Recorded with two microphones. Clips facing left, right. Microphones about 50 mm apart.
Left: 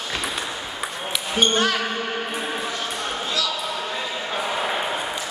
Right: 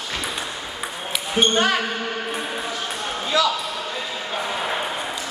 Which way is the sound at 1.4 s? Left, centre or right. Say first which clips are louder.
Right 1 dB; centre.